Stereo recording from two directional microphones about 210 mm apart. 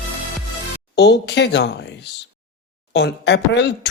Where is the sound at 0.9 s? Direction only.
55° left (ahead or behind).